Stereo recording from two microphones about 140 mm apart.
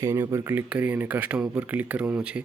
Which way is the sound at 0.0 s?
25° right (ahead or behind).